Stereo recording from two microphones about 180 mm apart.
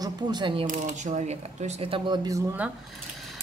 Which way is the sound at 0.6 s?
45° right (ahead or behind).